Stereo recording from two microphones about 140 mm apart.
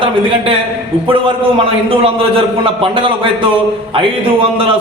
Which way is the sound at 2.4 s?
40° right (ahead or behind).